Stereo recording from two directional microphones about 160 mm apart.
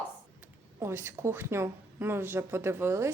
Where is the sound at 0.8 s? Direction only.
15° right (ahead or behind).